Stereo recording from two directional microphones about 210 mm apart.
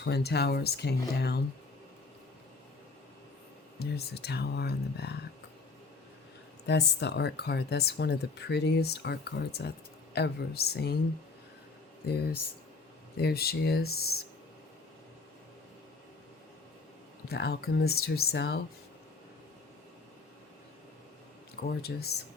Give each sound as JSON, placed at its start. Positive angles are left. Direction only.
{"t": 0.0, "sound": "speech", "side_deg": 50}
{"t": 3.8, "sound": "speech", "side_deg": 50}
{"t": 6.7, "sound": "speech", "side_deg": 55}
{"t": 13.1, "sound": "speech", "side_deg": 50}
{"t": 17.2, "sound": "speech", "side_deg": 50}
{"t": 21.7, "sound": "speech", "side_deg": 50}